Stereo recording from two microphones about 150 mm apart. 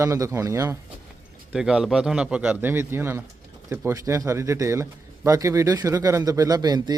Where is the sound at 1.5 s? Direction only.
5° right (ahead or behind).